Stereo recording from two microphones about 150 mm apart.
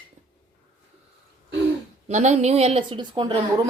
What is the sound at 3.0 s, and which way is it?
Speech, 30° right (ahead or behind).